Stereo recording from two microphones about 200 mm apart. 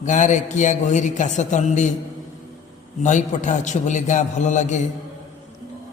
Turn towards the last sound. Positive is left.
turn(degrees=35)  # may be behind; listen again after turning